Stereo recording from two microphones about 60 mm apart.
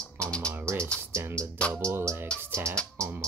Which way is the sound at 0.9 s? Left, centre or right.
Centre.